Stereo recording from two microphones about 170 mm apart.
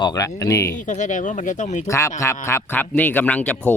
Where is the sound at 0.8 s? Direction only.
45° left (ahead or behind).